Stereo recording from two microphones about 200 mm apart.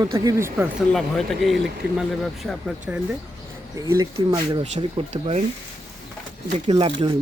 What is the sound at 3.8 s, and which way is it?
Speech, 15° right (ahead or behind).